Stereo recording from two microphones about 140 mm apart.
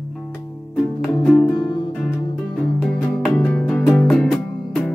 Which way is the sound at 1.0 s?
5° left (ahead or behind).